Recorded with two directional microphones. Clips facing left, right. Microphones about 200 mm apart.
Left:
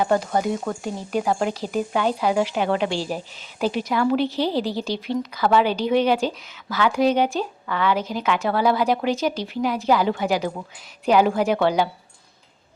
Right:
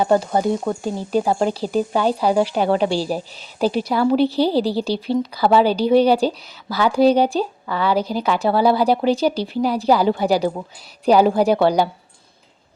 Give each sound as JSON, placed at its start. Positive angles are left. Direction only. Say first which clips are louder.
{"t": 0.0, "sound": "a woman's voice", "louder": "right 4 dB", "side_deg": -30}